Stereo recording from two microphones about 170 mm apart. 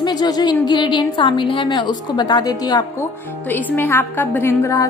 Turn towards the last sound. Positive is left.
turn(degrees=15)  # may be behind; listen again after turning